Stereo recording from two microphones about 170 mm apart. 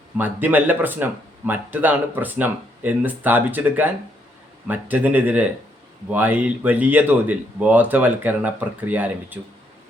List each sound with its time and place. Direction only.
0.2 s speech: 10° right (ahead or behind)